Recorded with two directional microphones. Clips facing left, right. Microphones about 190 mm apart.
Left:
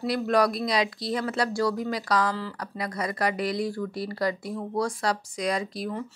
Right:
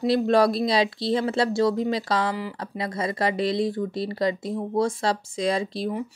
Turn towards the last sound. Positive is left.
turn(degrees=-25)  # may be behind; listen again after turning